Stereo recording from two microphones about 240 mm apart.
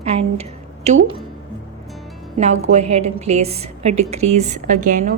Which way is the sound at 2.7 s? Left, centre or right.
Right.